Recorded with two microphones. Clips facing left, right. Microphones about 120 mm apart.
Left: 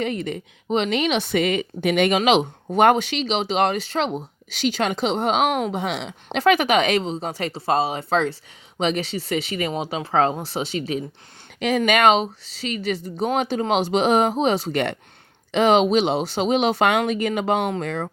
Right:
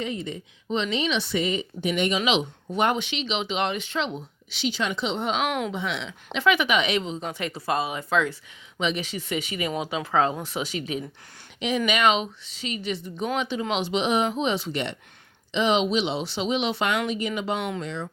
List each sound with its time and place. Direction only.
0.0 s speech: 65° left (ahead or behind)
1.1 s speech: 55° left (ahead or behind); by 11.0 s 35° left (ahead or behind)
11.9 s speech: 45° left (ahead or behind)